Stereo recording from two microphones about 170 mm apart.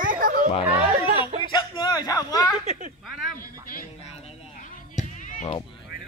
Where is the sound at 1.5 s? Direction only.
25° left (ahead or behind).